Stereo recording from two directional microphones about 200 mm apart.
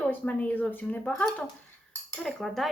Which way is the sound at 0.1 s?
10° left (ahead or behind).